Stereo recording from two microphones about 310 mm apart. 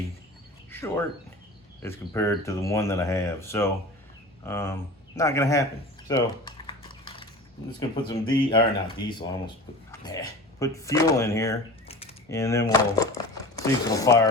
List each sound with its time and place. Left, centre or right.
0.7 s speech: centre
6.1 s typing: centre
7.8 s speech: centre